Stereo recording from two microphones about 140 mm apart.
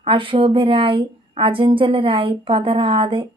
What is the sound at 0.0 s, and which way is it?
A woman's voice, 40° right (ahead or behind).